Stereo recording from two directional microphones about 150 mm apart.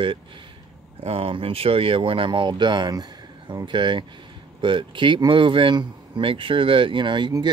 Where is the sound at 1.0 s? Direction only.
40° right (ahead or behind).